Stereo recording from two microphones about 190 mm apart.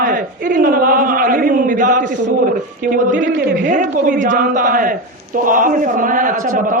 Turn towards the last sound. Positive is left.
turn(degrees=-45)  # may be behind; listen again after turning